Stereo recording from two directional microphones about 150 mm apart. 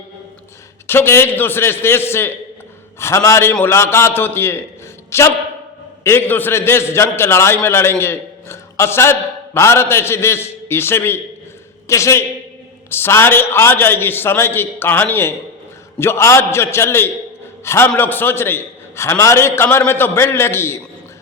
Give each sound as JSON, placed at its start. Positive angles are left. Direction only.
{"t": 0.9, "sound": "a man's voice", "side_deg": 15}